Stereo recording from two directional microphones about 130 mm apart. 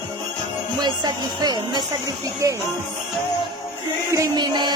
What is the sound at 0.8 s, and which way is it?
Speech, 35° right (ahead or behind).